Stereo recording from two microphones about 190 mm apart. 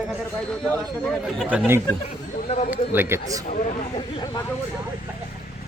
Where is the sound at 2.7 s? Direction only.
10° right (ahead or behind).